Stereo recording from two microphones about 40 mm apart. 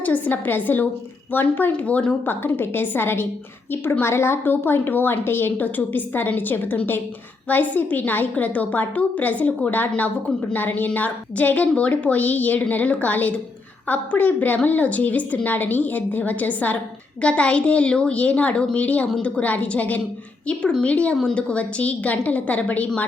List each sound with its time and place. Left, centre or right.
0.0 s a woman's voice: left
1.7 s a woman's voice: left
2.6 s a woman's voice: left
4.0 s a woman's voice: left
11.7 s a woman's voice: left
17.2 s a woman's voice: left
20.5 s a woman's voice: left